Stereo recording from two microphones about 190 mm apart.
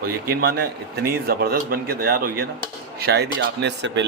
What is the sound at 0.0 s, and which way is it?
A man's voice, 55° right (ahead or behind).